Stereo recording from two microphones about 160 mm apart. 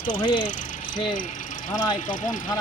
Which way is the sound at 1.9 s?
55° left (ahead or behind).